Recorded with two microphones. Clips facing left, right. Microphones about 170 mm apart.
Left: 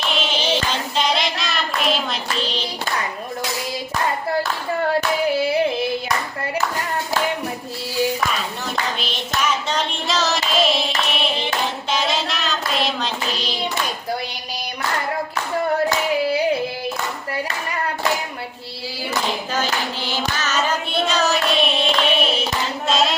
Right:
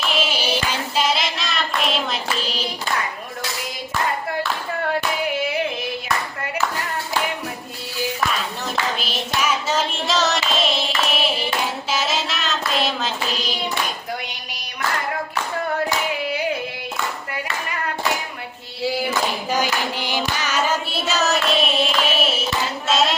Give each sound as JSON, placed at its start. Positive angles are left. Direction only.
{"t": 0.3, "sound": "child singing", "side_deg": -10}
{"t": 4.9, "sound": "hands", "side_deg": 35}
{"t": 8.7, "sound": "child singing", "side_deg": -5}
{"t": 19.5, "sound": "hands", "side_deg": -10}
{"t": 22.9, "sound": "a sound", "side_deg": 0}